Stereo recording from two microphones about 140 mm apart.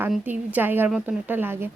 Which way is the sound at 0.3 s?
15° right (ahead or behind).